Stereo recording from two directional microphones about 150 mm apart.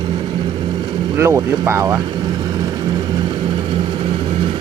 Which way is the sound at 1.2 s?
15° right (ahead or behind).